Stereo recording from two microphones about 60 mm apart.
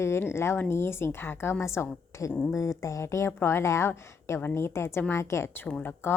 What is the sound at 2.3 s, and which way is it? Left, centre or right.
Speech, left.